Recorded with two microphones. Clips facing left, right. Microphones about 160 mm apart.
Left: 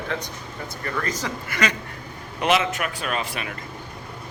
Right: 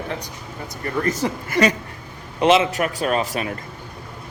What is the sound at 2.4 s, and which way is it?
Speech, 30° right (ahead or behind).